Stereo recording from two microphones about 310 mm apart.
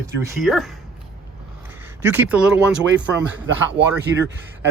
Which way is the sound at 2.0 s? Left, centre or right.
Centre.